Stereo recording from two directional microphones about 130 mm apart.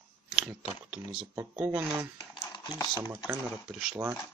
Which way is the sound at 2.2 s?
30° left (ahead or behind).